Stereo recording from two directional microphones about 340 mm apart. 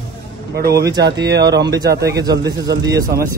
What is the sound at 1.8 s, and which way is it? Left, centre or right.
Speech, right.